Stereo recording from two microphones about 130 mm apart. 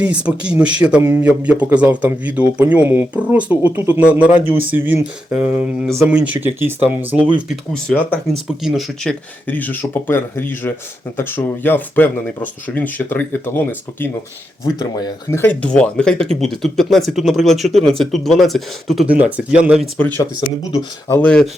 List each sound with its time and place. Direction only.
0.0 s speech: 10° right (ahead or behind)
7.7 s speech: 10° left (ahead or behind)
8.4 s speech: centre (ahead or behind)
9.5 s speech: 15° left (ahead or behind)
14.6 s speech: 30° left (ahead or behind)
15.3 s speech: 15° left (ahead or behind); by 19.0 s centre (ahead or behind)
19.0 s speech: 10° right (ahead or behind)
21.1 s speech: 10° left (ahead or behind)